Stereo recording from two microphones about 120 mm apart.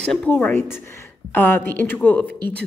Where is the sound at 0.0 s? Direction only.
5° left (ahead or behind).